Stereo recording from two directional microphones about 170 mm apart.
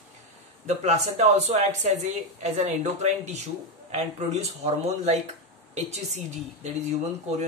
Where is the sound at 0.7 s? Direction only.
40° right (ahead or behind).